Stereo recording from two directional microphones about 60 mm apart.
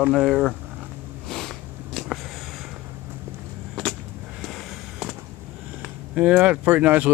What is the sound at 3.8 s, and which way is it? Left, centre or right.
Vehicle, centre.